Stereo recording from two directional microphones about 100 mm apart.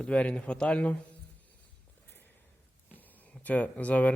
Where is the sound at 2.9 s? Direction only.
15° left (ahead or behind).